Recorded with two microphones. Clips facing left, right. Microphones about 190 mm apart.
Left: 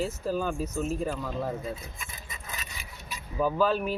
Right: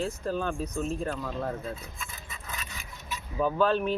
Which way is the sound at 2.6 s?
10° left (ahead or behind).